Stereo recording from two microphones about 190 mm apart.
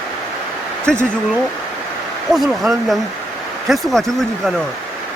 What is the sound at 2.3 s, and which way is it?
Speech, centre (ahead or behind).